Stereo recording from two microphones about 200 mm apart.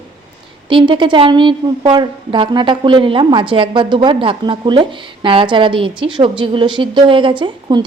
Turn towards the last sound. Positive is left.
turn(degrees=-25)  # may be behind; listen again after turning